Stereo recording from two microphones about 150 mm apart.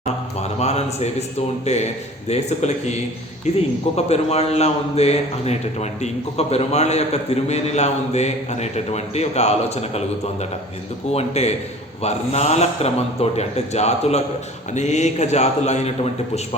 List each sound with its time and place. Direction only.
0.6 s a man's voice: 45° left (ahead or behind)
11.1 s a man's voice: 45° left (ahead or behind)